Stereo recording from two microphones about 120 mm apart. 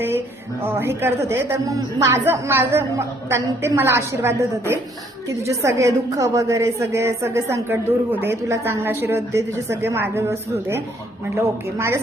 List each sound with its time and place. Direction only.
0.6 s a woman's voice: 20° right (ahead or behind)